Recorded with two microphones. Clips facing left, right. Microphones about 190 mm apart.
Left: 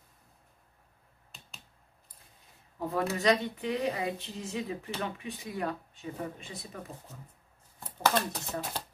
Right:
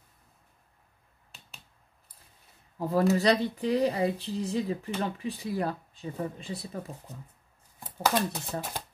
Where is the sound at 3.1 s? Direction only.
35° right (ahead or behind).